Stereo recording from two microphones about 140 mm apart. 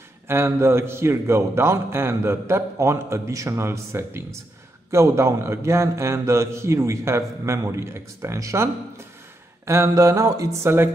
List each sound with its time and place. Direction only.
0.3 s a man's voice: 15° right (ahead or behind)